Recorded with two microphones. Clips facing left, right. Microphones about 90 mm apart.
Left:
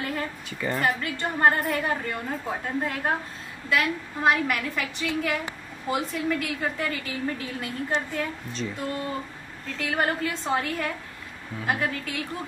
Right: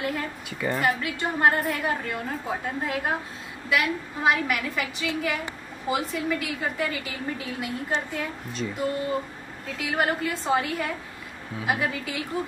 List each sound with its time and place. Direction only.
0.0 s a woman's voice: 5° right (ahead or behind)
9.7 s a woman's voice: 5° right (ahead or behind)